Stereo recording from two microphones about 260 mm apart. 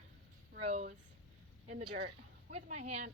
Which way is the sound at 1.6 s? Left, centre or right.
Right.